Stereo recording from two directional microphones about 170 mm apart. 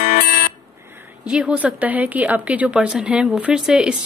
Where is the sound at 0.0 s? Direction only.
55° left (ahead or behind).